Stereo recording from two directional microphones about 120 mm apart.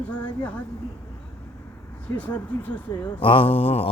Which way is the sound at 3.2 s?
45° left (ahead or behind).